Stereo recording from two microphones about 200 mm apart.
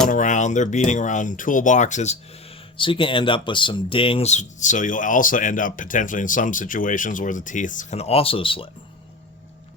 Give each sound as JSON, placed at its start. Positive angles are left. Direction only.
{"t": 0.1, "sound": "speech", "side_deg": 40}
{"t": 2.7, "sound": "speech", "side_deg": 25}